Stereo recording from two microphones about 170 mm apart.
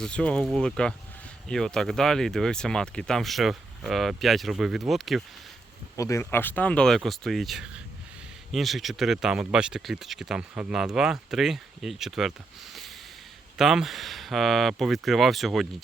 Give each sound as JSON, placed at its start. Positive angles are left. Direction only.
{"t": 0.0, "sound": "speech", "side_deg": 5}
{"t": 6.0, "sound": "speech", "side_deg": 15}
{"t": 13.6, "sound": "speech", "side_deg": 0}